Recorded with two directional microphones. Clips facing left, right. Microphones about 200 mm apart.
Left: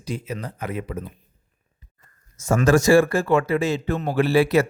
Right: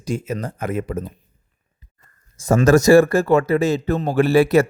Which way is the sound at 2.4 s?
35° right (ahead or behind).